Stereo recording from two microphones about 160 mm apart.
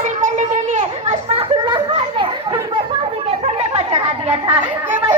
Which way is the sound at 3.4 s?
40° right (ahead or behind).